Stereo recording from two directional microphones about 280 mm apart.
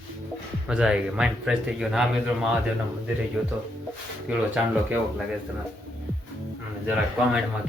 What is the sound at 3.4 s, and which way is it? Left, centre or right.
Speech, centre.